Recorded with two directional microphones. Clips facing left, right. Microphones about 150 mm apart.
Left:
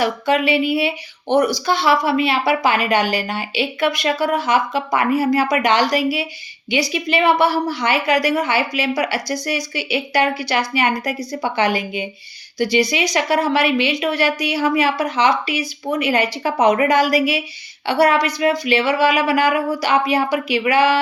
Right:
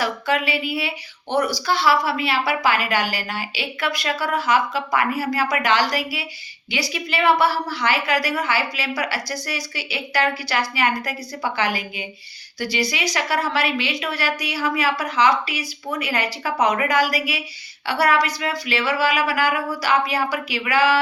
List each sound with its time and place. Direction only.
0.0 s speech: 20° left (ahead or behind)